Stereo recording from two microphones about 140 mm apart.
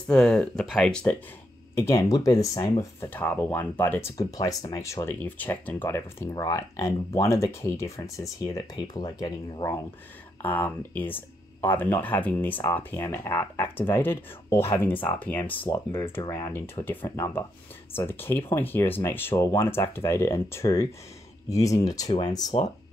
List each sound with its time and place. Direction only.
0.1 s speech: 5° left (ahead or behind)
1.8 s speech: 20° left (ahead or behind)
3.1 s speech: 10° left (ahead or behind)
10.4 s speech: 15° left (ahead or behind)
19.3 s speech: 25° left (ahead or behind)